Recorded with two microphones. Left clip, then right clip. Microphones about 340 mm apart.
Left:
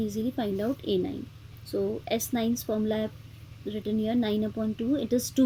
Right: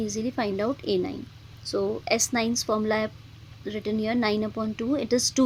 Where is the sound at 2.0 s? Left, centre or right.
Right.